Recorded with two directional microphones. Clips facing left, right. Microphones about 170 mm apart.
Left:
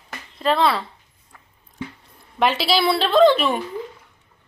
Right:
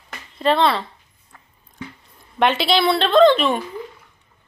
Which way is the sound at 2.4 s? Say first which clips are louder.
Right 2 dB; centre (ahead or behind).